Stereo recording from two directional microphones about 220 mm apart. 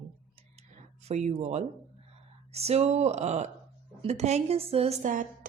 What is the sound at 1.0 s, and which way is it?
A woman's voice, 30° right (ahead or behind).